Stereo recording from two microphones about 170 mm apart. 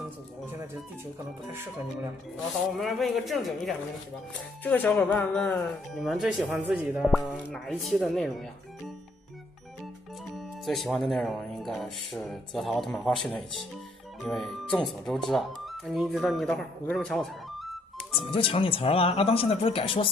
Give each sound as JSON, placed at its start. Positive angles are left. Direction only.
{"t": 2.7, "sound": "speech", "side_deg": 0}
{"t": 10.3, "sound": "speech", "side_deg": 0}
{"t": 18.3, "sound": "speech", "side_deg": 30}